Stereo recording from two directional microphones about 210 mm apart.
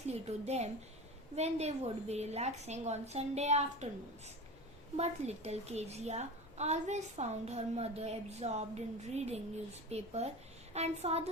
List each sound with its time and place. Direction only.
0.1 s a woman's voice: 30° right (ahead or behind)
4.9 s a woman's voice: 30° right (ahead or behind)